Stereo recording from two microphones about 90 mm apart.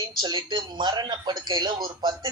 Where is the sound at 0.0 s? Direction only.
50° right (ahead or behind).